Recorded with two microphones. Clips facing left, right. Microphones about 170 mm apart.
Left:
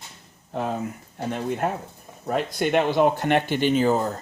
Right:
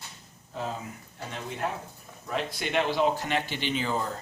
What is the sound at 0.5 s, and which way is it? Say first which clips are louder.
Speech: left 7 dB; 60° left (ahead or behind).